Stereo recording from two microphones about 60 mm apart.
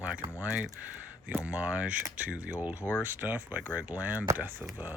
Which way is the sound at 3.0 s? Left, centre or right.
Right.